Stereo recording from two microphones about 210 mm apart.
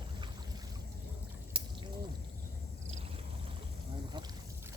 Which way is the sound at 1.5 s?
25° right (ahead or behind).